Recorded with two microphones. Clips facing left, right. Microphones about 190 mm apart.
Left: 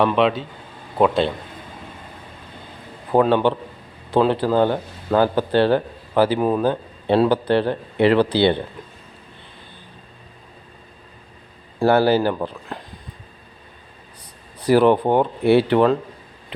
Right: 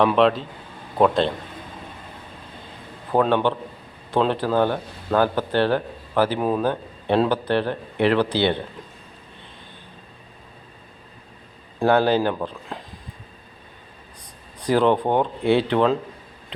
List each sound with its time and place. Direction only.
0.0 s speech: centre (ahead or behind)
3.1 s speech: 10° left (ahead or behind)
11.8 s speech: 10° left (ahead or behind)
14.6 s speech: 10° left (ahead or behind)